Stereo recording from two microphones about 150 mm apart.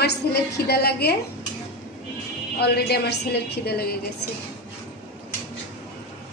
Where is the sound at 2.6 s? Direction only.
90° left.